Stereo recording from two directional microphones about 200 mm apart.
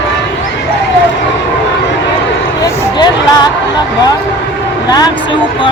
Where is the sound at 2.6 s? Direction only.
20° left (ahead or behind).